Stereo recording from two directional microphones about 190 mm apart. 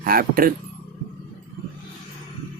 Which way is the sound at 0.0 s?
50° right (ahead or behind).